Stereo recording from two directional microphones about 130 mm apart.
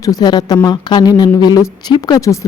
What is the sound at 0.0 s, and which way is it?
Speech, 30° left (ahead or behind).